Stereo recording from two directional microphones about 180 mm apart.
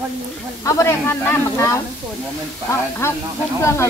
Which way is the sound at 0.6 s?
15° left (ahead or behind).